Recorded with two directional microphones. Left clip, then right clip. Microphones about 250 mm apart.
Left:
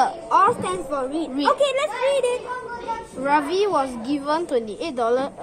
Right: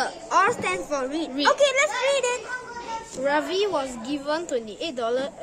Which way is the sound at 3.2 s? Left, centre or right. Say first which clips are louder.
Left 4 dB; centre.